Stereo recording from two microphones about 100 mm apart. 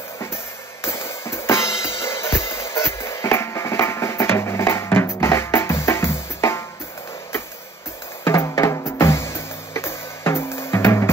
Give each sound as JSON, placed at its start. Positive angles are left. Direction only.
{"t": 0.8, "sound": "drum kit", "side_deg": 25}
{"t": 8.2, "sound": "music", "side_deg": 25}